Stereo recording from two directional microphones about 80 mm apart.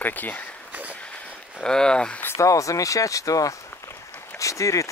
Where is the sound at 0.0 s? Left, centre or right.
Left.